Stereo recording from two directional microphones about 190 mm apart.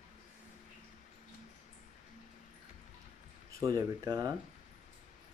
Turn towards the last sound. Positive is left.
turn(degrees=-20)  # may be behind; listen again after turning